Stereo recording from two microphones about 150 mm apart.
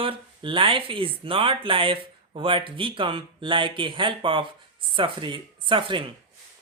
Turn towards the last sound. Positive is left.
turn(degrees=-35)  # may be behind; listen again after turning